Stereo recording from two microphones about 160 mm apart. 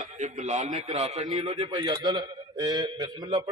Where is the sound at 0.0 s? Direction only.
45° right (ahead or behind).